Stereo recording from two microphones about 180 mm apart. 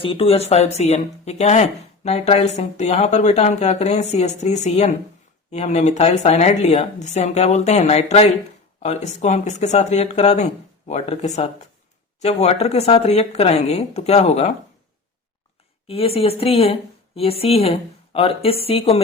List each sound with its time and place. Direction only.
0.0 s speech: 30° left (ahead or behind)
15.9 s speech: 35° left (ahead or behind)